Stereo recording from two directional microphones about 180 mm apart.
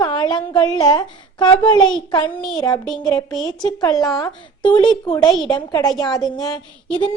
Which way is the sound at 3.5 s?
25° left (ahead or behind).